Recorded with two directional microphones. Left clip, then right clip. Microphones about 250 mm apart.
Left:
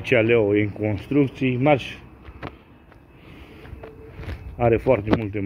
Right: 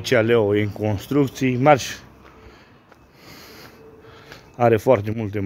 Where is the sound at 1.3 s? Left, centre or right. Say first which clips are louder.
Right 2 dB; right.